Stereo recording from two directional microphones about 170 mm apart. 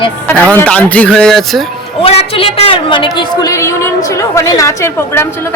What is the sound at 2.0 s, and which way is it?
A woman's voice, 35° left (ahead or behind).